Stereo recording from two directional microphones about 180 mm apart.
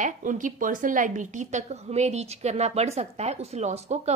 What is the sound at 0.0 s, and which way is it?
A woman's voice, 45° right (ahead or behind).